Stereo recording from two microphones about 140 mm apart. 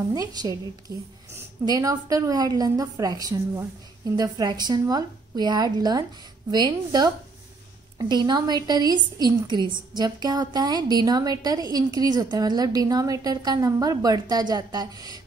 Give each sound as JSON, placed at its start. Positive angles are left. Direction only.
{"t": 0.1, "sound": "a woman's voice", "side_deg": -25}